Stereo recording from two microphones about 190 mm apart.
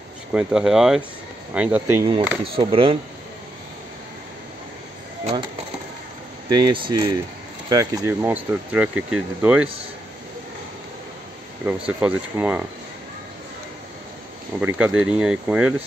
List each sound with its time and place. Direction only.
0.3 s speech: 5° right (ahead or behind)
2.5 s speech: 30° right (ahead or behind)
5.2 s speech: 30° right (ahead or behind)
6.5 s speech: 25° right (ahead or behind); by 9.7 s 5° right (ahead or behind)
11.6 s speech: 10° right (ahead or behind)
14.6 s speech: 10° right (ahead or behind)